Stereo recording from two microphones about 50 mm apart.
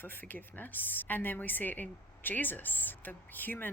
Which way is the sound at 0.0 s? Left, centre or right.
Left.